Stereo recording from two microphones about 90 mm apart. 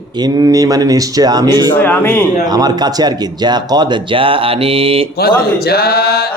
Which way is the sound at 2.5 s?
45° right (ahead or behind).